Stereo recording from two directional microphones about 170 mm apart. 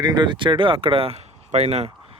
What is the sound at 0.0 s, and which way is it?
Speech, 25° right (ahead or behind).